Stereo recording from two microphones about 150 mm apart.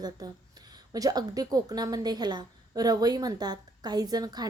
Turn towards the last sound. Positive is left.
turn(degrees=-25)  # may be behind; listen again after turning